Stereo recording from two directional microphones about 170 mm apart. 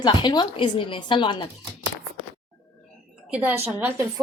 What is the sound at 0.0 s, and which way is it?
A woman's voice, 25° left (ahead or behind).